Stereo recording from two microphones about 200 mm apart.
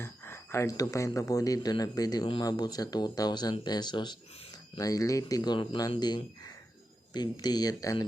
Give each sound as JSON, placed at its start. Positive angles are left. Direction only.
{"t": 0.0, "sound": "speech", "side_deg": 15}